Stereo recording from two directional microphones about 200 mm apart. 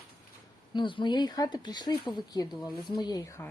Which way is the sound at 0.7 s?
25° left (ahead or behind).